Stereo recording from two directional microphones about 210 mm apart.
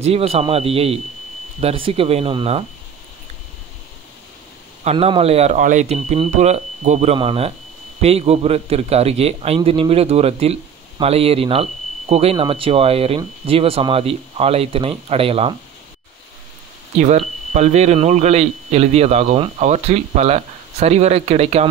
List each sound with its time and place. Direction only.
0.0 s a man's voice: 30° right (ahead or behind)
4.8 s a man's voice: 25° right (ahead or behind)
17.5 s speech: 35° right (ahead or behind)